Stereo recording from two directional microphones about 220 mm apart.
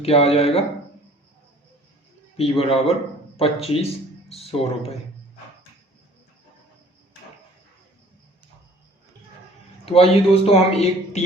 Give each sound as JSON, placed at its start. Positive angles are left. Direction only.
{"t": 0.0, "sound": "a man's voice", "side_deg": 25}
{"t": 2.3, "sound": "a man's voice", "side_deg": 25}
{"t": 9.8, "sound": "a man's voice", "side_deg": 25}